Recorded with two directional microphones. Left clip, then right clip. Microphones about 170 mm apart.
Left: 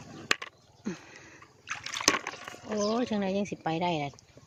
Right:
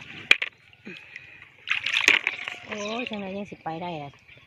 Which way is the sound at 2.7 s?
45° left (ahead or behind).